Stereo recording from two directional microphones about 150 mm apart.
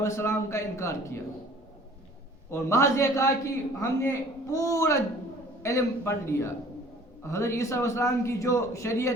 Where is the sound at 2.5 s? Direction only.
20° left (ahead or behind).